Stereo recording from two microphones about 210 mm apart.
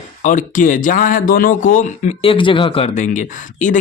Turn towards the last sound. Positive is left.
turn(degrees=35)  # may be behind; listen again after turning